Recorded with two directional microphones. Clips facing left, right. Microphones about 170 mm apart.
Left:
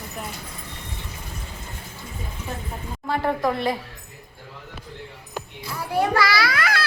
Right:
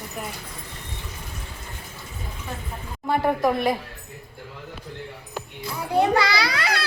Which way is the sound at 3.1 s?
15° right (ahead or behind).